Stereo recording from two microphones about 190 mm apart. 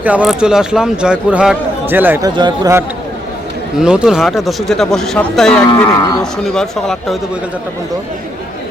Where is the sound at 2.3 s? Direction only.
25° right (ahead or behind).